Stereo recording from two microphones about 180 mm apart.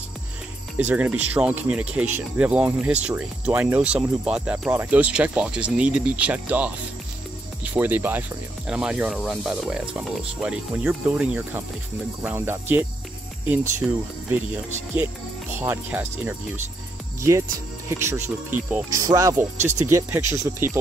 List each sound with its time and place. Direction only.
0.7 s speech: 10° right (ahead or behind)
13.8 s speech: 5° right (ahead or behind)
15.6 s speech: 10° right (ahead or behind)
17.2 s speech: 15° right (ahead or behind)